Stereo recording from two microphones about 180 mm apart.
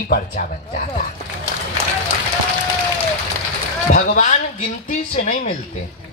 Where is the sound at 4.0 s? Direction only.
45° left (ahead or behind).